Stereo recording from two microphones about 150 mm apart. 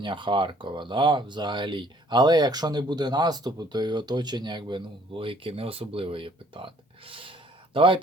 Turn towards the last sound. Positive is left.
turn(degrees=-35)  # may be behind; listen again after turning